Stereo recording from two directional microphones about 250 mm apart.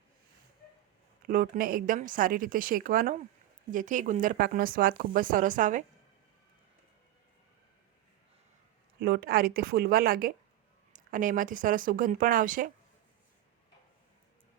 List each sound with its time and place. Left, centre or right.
1.2 s speech: right
9.0 s speech: right